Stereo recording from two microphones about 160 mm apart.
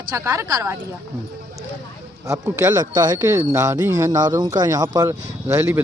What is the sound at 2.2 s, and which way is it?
Speech, 20° right (ahead or behind).